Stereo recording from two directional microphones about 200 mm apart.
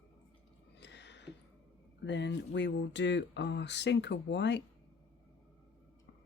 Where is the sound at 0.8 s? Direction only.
60° left (ahead or behind).